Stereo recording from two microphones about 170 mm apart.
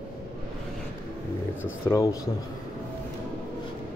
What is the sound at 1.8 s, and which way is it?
Speech, 20° left (ahead or behind).